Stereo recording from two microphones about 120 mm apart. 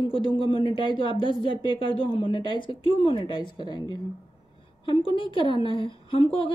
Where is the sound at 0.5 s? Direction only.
45° left (ahead or behind).